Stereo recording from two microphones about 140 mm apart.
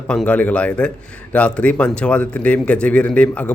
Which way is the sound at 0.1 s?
5° left (ahead or behind).